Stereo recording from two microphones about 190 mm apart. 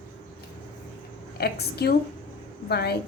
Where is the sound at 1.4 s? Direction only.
55° left (ahead or behind).